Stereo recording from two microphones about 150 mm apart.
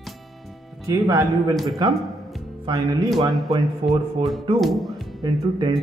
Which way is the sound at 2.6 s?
25° right (ahead or behind).